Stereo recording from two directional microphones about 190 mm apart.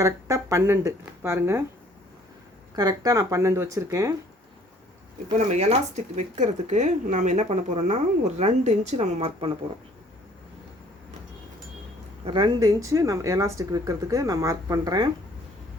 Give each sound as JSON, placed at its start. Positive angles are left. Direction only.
{"t": 0.0, "sound": "speech", "side_deg": -15}
{"t": 2.7, "sound": "speech", "side_deg": -20}
{"t": 5.5, "sound": "speech", "side_deg": -35}
{"t": 12.2, "sound": "speech", "side_deg": -25}